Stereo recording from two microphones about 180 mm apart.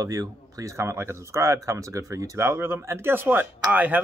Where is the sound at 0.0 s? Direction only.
20° right (ahead or behind).